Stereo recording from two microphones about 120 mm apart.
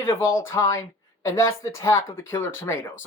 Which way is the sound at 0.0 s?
20° left (ahead or behind).